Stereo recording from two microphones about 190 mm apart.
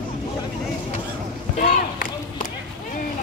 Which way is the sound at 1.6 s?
45° left (ahead or behind).